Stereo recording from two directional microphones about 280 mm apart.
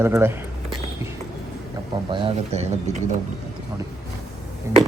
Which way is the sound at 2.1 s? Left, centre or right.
Right.